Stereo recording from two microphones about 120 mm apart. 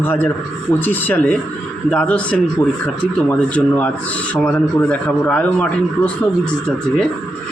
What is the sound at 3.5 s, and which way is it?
Speech, 15° left (ahead or behind).